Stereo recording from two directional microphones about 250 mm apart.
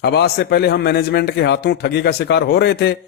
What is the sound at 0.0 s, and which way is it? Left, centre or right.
A man's voice, left.